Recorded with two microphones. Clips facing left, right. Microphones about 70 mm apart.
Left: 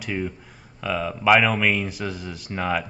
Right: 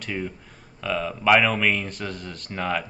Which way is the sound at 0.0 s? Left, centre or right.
Centre.